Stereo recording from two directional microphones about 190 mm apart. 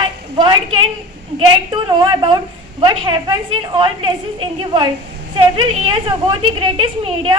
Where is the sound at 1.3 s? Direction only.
25° right (ahead or behind).